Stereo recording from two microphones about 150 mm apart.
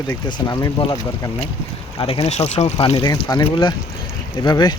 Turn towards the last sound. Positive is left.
turn(degrees=30)  # may be behind; listen again after turning